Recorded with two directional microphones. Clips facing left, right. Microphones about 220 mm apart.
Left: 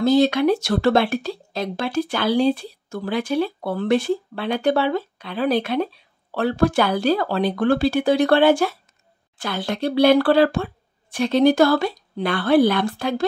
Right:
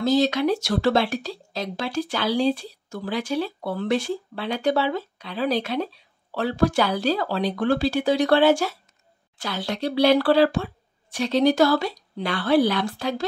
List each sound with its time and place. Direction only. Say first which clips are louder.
0.0 s speech: left 4 dB; 55° left (ahead or behind)